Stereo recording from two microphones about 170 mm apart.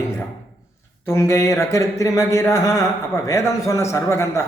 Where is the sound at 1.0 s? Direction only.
15° left (ahead or behind).